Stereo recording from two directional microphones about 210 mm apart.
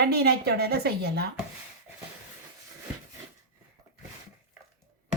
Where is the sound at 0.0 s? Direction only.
50° right (ahead or behind).